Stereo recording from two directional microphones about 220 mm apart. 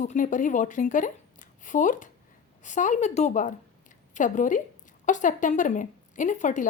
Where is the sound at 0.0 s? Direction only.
35° left (ahead or behind).